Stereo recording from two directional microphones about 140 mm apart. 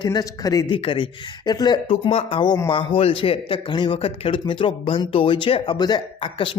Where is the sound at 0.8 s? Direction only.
40° left (ahead or behind).